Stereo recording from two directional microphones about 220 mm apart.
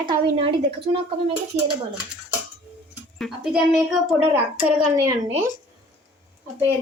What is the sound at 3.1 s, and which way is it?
A woman's voice, centre (ahead or behind).